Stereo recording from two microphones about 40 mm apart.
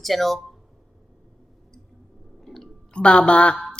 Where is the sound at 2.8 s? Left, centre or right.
Left.